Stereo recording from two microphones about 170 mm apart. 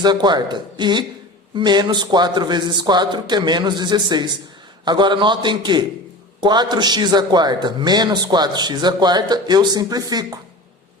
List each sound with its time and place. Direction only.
0.0 s a man's voice: 25° right (ahead or behind)